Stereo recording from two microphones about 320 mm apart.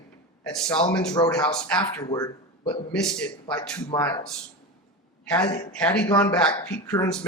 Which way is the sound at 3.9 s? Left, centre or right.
Centre.